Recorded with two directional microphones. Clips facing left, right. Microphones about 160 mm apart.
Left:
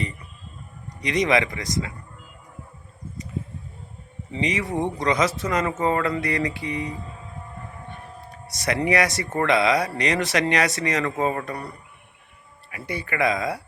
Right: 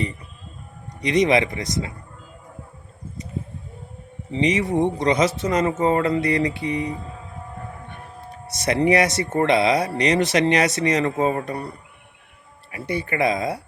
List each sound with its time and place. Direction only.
1.0 s speech: 25° right (ahead or behind)
4.3 s speech: 25° right (ahead or behind)
8.5 s speech: 25° right (ahead or behind)
12.7 s speech: 30° right (ahead or behind)